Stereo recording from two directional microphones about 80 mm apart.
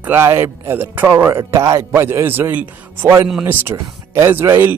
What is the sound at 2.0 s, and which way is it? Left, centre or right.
Speech, right.